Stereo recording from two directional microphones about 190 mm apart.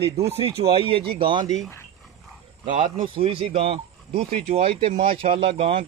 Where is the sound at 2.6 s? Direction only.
25° right (ahead or behind).